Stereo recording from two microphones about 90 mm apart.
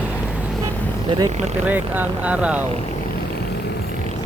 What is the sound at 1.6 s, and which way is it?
Speech, 20° right (ahead or behind).